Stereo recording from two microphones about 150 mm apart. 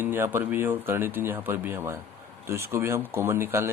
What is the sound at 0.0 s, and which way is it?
Speech, 15° right (ahead or behind).